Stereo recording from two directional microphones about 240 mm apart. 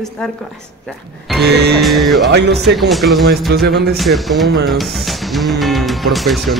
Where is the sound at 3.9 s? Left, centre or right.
Centre.